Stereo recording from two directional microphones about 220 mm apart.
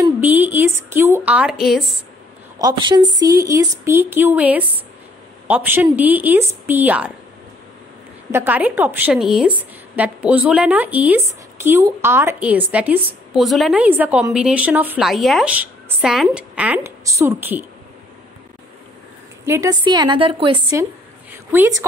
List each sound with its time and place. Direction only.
0.0 s a woman's voice: 10° right (ahead or behind)
2.6 s a woman's voice: 20° right (ahead or behind)
8.3 s a woman's voice: 10° right (ahead or behind)
19.4 s a woman's voice: 15° right (ahead or behind)
21.5 s a woman's voice: 10° right (ahead or behind)